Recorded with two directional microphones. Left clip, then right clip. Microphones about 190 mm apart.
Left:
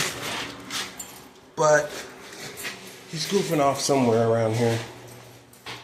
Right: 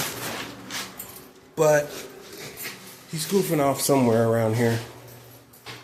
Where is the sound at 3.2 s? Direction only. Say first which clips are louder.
Even; 30° right (ahead or behind).